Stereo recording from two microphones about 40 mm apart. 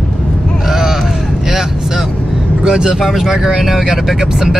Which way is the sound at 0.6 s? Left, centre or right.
Centre.